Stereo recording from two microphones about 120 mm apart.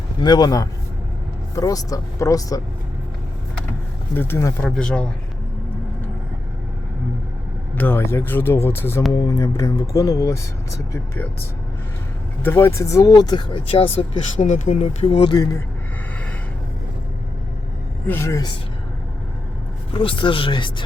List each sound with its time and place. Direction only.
0.2 s speech: 35° left (ahead or behind)
4.1 s speech: 20° left (ahead or behind)
4.7 s a man's voice: 5° left (ahead or behind)
7.8 s speech: 20° left (ahead or behind)
12.4 s speech: 20° left (ahead or behind); by 14.0 s 50° left (ahead or behind)
14.3 s speech: 90° left
15.0 s speech: 45° left (ahead or behind)
18.0 s speech: 20° left (ahead or behind)
19.9 s speech: 45° left (ahead or behind)